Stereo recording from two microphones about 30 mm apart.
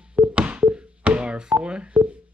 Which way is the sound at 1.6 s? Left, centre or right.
Right.